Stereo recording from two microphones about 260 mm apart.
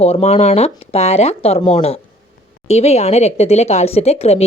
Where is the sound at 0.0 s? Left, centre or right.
Left.